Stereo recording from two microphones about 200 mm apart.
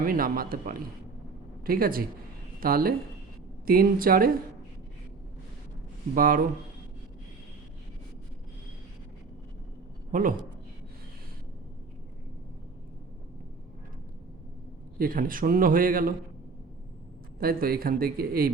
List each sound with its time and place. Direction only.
0.0 s a man's voice: 45° right (ahead or behind)
6.1 s a man's voice: 45° right (ahead or behind)
10.1 s a woman's voice: 45° right (ahead or behind)
14.9 s a man's voice: 45° right (ahead or behind)
17.4 s a man's voice: 50° right (ahead or behind)